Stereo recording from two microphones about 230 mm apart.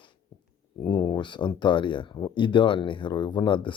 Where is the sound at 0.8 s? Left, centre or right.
Centre.